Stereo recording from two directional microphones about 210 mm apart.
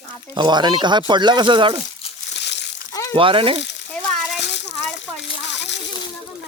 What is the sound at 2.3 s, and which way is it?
Crumpling, 55° left (ahead or behind).